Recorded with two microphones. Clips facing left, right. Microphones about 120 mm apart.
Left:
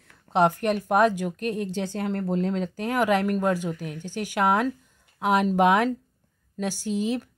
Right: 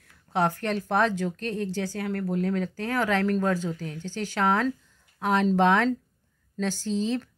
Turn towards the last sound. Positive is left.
turn(degrees=10)  # may be behind; listen again after turning